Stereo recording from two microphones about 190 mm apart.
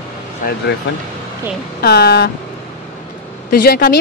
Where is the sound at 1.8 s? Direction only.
60° left (ahead or behind).